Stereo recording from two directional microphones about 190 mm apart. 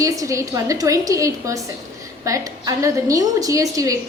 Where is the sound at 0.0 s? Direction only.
15° right (ahead or behind).